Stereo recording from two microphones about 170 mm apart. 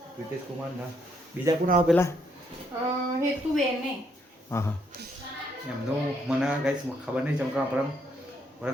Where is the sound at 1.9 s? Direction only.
Centre (ahead or behind).